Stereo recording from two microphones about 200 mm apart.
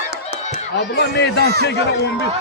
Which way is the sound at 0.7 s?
55° left (ahead or behind).